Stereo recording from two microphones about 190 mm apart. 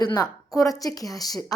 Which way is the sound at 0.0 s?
20° left (ahead or behind).